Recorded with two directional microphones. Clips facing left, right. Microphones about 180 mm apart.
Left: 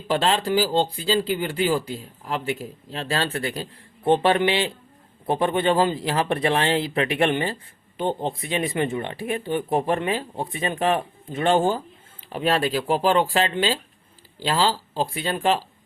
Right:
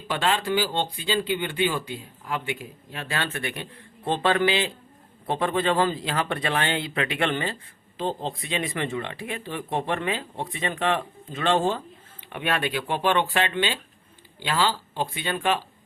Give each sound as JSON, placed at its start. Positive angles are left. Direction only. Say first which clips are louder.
{"t": 0.1, "sound": "speech", "louder": "left 3 dB", "side_deg": 35}